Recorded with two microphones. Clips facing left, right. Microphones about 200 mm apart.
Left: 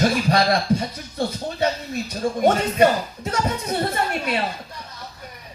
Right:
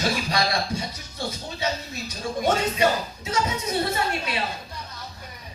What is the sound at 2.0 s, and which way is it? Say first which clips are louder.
Speech: left 5 dB; 55° left (ahead or behind).